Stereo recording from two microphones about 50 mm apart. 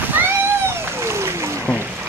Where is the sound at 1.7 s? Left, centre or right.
Left.